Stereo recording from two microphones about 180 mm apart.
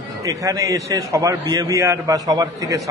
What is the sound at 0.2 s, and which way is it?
A man's voice, 20° right (ahead or behind).